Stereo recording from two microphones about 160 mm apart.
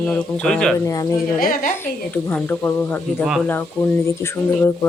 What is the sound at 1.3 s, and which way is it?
Speech, 65° left (ahead or behind).